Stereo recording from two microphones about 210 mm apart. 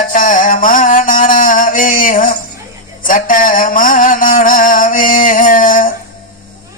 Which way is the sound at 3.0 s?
40° left (ahead or behind).